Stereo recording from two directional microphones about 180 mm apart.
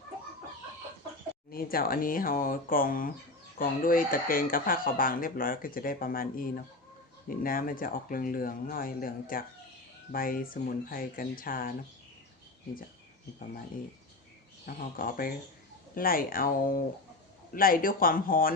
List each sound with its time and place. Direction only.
1.5 s speech: 55° left (ahead or behind)
14.7 s speech: 50° left (ahead or behind)